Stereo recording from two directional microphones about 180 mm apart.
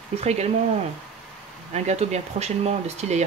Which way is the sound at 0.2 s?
35° right (ahead or behind).